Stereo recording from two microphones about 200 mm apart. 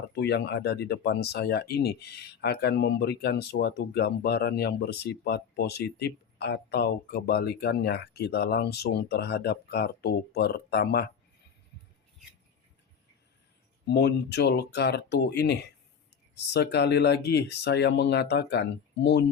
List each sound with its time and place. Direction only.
0.1 s speech: 55° left (ahead or behind)
13.8 s speech: 55° left (ahead or behind)